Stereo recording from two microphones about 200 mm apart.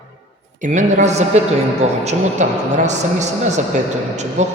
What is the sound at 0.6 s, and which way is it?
A man's voice, 35° right (ahead or behind).